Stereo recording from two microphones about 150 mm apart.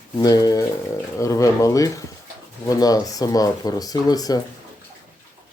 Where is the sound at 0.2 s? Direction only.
25° left (ahead or behind).